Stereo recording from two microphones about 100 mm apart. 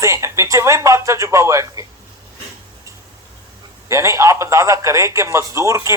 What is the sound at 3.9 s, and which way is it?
A man's voice, 30° right (ahead or behind).